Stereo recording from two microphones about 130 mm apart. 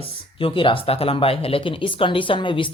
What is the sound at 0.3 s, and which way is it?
Speech, 40° left (ahead or behind).